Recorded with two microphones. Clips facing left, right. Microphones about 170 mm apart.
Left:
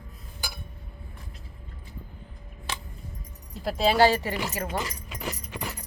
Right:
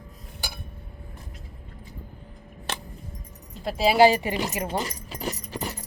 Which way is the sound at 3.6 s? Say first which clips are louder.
Right 3 dB; 5° right (ahead or behind).